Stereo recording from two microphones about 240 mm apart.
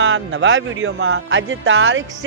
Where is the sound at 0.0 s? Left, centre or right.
Right.